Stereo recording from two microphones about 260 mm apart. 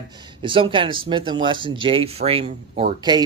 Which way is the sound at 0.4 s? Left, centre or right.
Centre.